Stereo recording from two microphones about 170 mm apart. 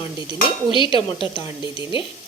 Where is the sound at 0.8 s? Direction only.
30° left (ahead or behind).